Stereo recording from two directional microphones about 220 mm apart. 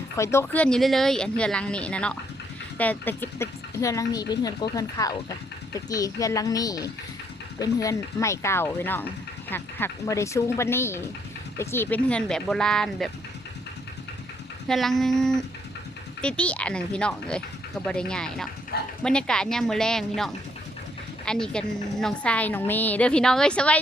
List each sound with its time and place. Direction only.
0.2 s a woman's voice: 10° left (ahead or behind)
14.7 s a woman's voice: centre (ahead or behind)
18.7 s speech: 45° left (ahead or behind)
19.0 s a woman's voice: 5° left (ahead or behind)